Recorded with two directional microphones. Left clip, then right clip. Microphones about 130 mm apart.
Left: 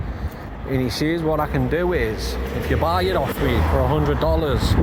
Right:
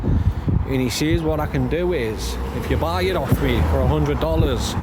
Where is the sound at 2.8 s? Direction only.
20° right (ahead or behind).